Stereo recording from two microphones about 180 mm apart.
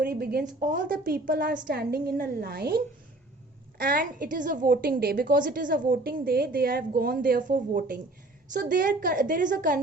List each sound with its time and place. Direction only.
0.0 s a woman's voice: 55° right (ahead or behind)